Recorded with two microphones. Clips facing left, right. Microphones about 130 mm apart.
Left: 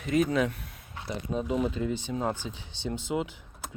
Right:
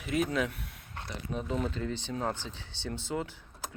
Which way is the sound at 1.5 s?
10° left (ahead or behind).